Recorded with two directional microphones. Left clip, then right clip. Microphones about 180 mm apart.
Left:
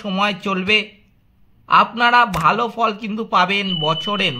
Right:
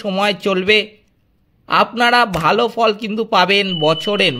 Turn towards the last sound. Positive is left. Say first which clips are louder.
# right 4 dB
turn(degrees=-35)  # may be behind; listen again after turning